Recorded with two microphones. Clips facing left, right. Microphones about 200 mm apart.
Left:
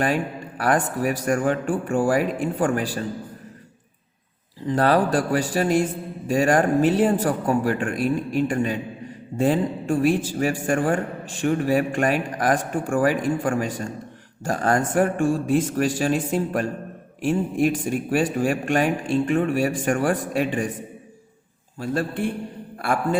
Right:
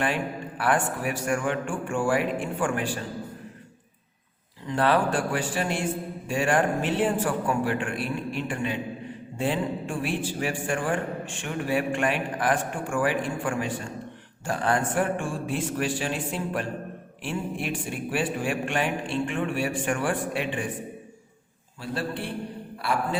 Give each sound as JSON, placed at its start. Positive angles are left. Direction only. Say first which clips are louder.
{"t": 0.0, "sound": "a man's voice", "louder": "left 4 dB", "side_deg": 40}
{"t": 4.6, "sound": "a man's voice", "louder": "left 4 dB", "side_deg": 40}
{"t": 21.8, "sound": "a man's voice", "louder": "left 6 dB", "side_deg": 45}